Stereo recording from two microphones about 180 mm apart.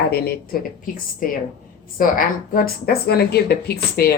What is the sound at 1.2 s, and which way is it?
A woman's voice, 50° left (ahead or behind).